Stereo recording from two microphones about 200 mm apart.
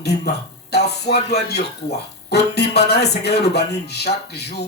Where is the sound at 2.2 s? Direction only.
55° left (ahead or behind).